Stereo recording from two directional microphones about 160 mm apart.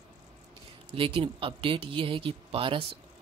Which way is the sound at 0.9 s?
35° right (ahead or behind).